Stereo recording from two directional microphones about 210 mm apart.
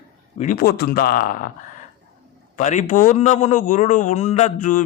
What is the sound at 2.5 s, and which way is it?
A man's voice, 35° left (ahead or behind).